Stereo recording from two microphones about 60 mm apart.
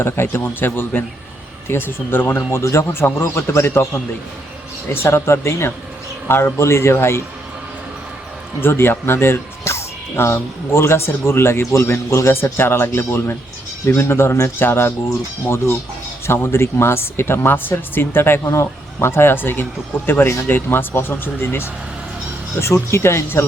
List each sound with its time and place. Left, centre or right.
0.0 s speech: left
5.0 s speech: left
8.6 s speech: left
18.4 s a man's voice: left
18.9 s speech: left
22.6 s speech: left